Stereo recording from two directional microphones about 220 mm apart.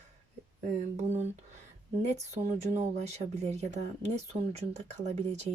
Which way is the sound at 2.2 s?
30° right (ahead or behind).